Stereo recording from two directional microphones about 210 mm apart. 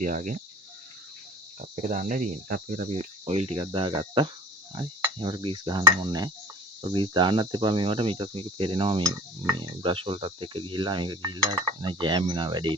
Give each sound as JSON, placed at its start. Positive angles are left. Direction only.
{"t": 0.0, "sound": "cricket", "side_deg": -35}
{"t": 1.7, "sound": "cricket", "side_deg": -40}
{"t": 4.7, "sound": "speech", "side_deg": -25}